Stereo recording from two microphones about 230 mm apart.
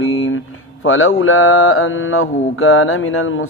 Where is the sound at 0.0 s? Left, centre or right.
Left.